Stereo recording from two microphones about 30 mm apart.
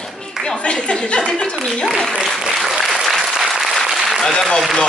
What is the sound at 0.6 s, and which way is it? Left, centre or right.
Speech, left.